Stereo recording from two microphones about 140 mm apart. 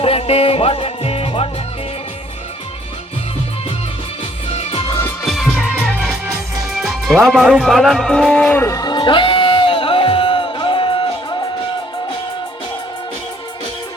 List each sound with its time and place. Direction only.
0.0 s music: 45° left (ahead or behind)
5.2 s music: centre (ahead or behind)
6.7 s speech: centre (ahead or behind)
8.6 s music: 25° left (ahead or behind)